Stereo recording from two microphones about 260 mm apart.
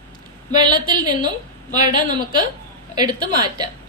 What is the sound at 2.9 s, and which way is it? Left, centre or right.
Speech, centre.